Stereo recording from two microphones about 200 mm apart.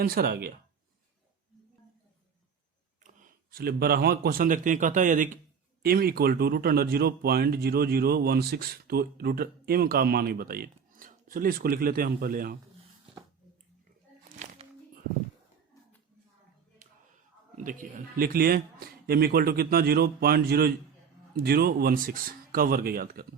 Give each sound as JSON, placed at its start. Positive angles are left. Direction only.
{"t": 0.0, "sound": "speech", "side_deg": -50}
{"t": 3.0, "sound": "speech", "side_deg": -40}
{"t": 17.6, "sound": "speech", "side_deg": -40}